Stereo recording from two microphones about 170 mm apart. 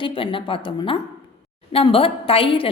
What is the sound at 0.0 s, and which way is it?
A woman's voice, 30° left (ahead or behind).